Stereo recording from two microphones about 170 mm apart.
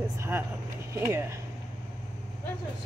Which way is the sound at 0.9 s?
15° right (ahead or behind).